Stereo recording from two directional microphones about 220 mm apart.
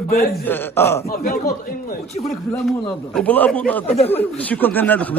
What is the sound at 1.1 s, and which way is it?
Speech, 45° left (ahead or behind).